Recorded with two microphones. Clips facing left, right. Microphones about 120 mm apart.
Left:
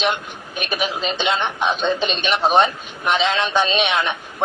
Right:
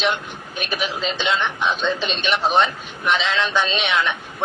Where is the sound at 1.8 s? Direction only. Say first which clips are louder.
Left 2 dB; 55° left (ahead or behind).